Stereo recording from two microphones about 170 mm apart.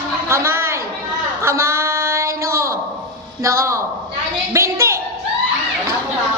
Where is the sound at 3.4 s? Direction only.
15° right (ahead or behind).